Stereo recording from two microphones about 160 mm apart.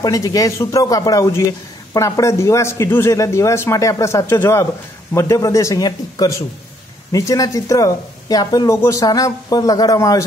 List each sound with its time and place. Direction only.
0.0 s speech: 25° left (ahead or behind)